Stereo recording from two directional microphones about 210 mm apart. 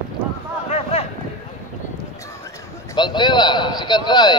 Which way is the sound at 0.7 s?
30° left (ahead or behind).